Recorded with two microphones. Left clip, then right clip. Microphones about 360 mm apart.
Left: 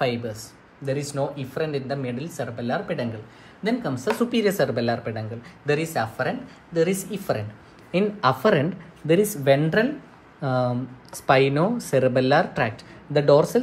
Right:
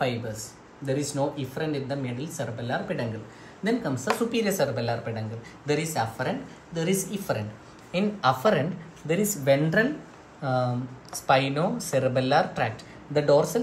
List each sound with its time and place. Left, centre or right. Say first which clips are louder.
0.0 s speech: left 3 dB; left